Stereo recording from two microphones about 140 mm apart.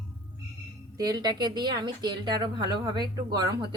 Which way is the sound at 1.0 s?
30° right (ahead or behind).